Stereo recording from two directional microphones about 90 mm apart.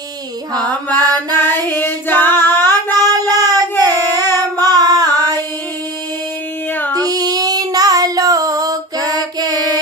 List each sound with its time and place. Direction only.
0.6 s mantra: 15° left (ahead or behind)
0.9 s mantra: 50° right (ahead or behind)
1.4 s female singing: 25° left (ahead or behind)
2.7 s child singing: 45° right (ahead or behind)
3.7 s child singing: 25° left (ahead or behind)
4.8 s a sound: 45° right (ahead or behind)
6.9 s child singing: 45° right (ahead or behind)